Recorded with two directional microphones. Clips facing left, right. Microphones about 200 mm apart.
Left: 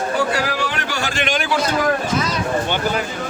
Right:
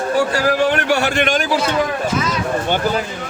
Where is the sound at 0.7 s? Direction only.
60° right (ahead or behind).